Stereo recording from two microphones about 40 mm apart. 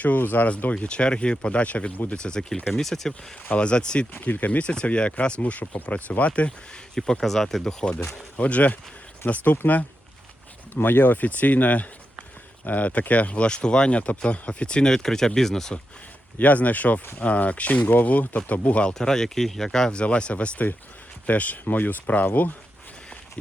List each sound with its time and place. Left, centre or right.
0.2 s speech: left
0.8 s speech: left
2.8 s speech: centre
3.5 s speech: left
4.1 s speech: left
6.9 s speech: centre
7.3 s speech: centre; by 9.6 s left
10.8 s speech: left
14.8 s speech: centre
16.4 s speech: left
18.9 s speech: centre
19.9 s speech: left
21.2 s speech: left
21.6 s speech: left